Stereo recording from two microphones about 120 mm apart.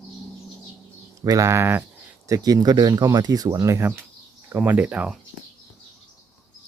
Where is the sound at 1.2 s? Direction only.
30° right (ahead or behind).